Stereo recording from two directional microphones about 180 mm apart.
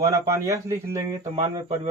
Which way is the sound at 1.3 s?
30° right (ahead or behind).